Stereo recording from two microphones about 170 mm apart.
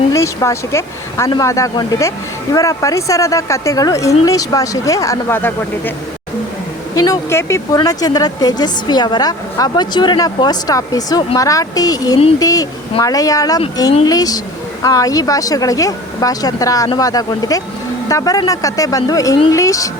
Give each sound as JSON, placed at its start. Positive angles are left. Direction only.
{"t": 0.1, "sound": "a woman's voice", "side_deg": 15}
{"t": 6.9, "sound": "speech", "side_deg": 20}